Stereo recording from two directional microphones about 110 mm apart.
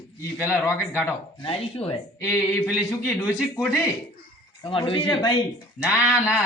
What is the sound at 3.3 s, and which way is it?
Speech, 5° left (ahead or behind).